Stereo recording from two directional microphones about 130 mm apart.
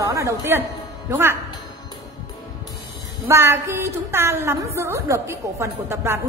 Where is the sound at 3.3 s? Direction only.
20° right (ahead or behind).